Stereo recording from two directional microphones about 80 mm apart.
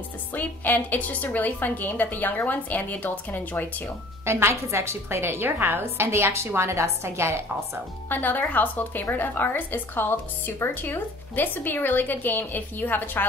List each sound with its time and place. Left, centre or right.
0.3 s speech: left
4.2 s a woman's voice: right
8.1 s speech: left